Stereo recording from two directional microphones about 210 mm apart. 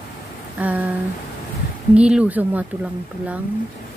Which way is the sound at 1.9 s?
5° right (ahead or behind).